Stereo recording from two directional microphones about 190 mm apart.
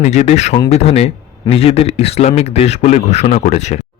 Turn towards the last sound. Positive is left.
turn(degrees=35)  # may be behind; listen again after turning